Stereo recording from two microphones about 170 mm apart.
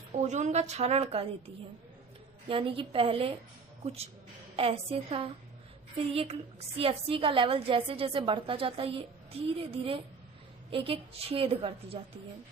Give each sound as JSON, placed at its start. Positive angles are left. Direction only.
{"t": 0.2, "sound": "a woman's voice", "side_deg": -45}
{"t": 2.5, "sound": "a woman's voice", "side_deg": -30}